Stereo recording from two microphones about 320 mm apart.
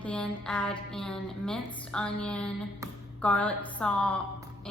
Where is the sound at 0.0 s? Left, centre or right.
Centre.